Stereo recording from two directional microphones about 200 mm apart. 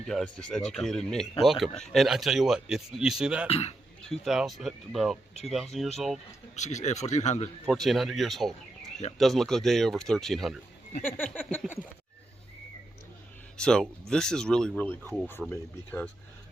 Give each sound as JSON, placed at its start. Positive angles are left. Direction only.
{"t": 0.0, "sound": "speech", "side_deg": 0}
{"t": 3.4, "sound": "speech", "side_deg": 30}
{"t": 4.1, "sound": "speech", "side_deg": 0}
{"t": 6.6, "sound": "speech", "side_deg": 35}
{"t": 7.6, "sound": "speech", "side_deg": 0}
{"t": 13.6, "sound": "speech", "side_deg": 5}